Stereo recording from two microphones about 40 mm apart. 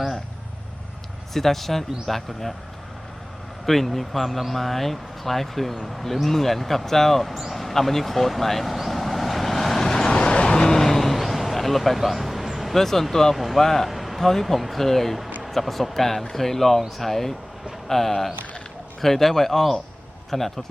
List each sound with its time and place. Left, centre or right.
1.3 s speech: centre
3.7 s speech: centre
7.5 s vehicle: centre
10.1 s vehicle: left; by 12.7 s centre
12.7 s a man's voice: centre
13.6 s a man's voice: centre
13.8 s a man's voice: centre